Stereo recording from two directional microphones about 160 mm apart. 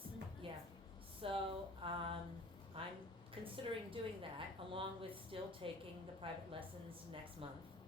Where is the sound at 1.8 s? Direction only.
35° right (ahead or behind).